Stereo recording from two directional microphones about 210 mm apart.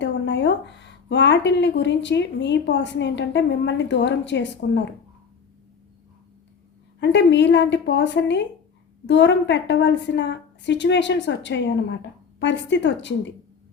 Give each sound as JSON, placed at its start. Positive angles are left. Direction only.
{"t": 0.0, "sound": "speech", "side_deg": 55}
{"t": 7.0, "sound": "speech", "side_deg": 55}